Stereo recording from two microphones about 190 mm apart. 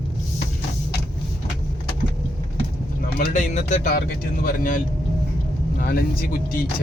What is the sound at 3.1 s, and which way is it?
Speech, 45° left (ahead or behind).